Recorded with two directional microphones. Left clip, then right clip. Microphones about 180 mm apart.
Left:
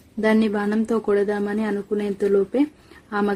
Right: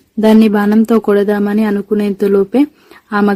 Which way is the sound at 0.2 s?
45° right (ahead or behind).